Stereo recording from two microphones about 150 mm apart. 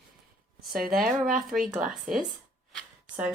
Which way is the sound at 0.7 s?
Centre (ahead or behind).